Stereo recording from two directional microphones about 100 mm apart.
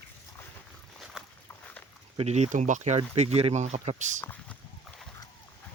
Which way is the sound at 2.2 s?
90° right.